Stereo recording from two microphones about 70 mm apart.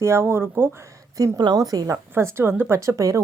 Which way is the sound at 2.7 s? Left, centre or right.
Right.